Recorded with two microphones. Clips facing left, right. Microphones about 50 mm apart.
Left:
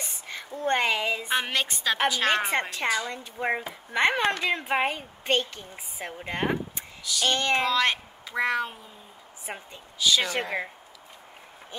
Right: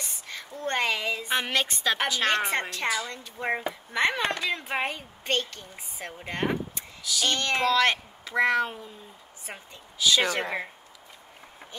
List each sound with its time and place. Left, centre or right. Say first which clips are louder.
0.0 s a woman's voice: left 1 dB; centre
1.3 s a woman's voice: right 3 dB; centre; by 4.7 s left
4.7 s a woman's voice: left 3 dB; centre
7.0 s a woman's voice: left 1 dB; centre
9.5 s a woman's voice: left 4 dB; centre
9.9 s a woman's voice: right 1 dB; centre